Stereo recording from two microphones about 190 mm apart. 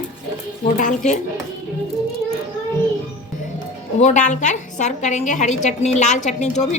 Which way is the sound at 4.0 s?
40° left (ahead or behind).